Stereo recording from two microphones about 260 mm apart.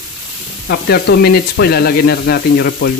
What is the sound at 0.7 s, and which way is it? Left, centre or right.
Speech, left.